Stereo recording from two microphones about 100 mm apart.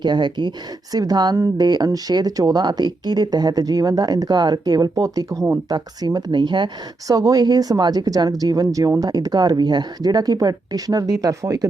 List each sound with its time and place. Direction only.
0.0 s speech: 50° right (ahead or behind)
7.1 s speech: 35° right (ahead or behind)